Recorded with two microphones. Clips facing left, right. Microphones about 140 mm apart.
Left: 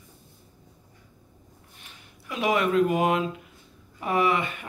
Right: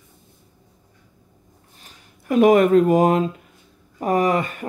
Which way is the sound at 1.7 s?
45° right (ahead or behind).